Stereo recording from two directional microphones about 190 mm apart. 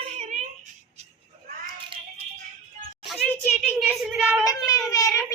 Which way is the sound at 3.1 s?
5° left (ahead or behind).